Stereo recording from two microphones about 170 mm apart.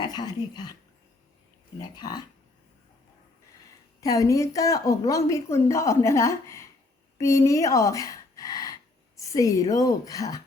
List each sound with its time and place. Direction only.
0.0 s a woman's voice: 25° left (ahead or behind)
1.8 s a woman's voice: 25° left (ahead or behind)
4.0 s a woman's voice: 20° left (ahead or behind)